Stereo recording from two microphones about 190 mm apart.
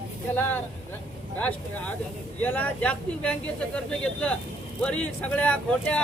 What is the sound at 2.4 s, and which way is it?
Speech, 10° left (ahead or behind).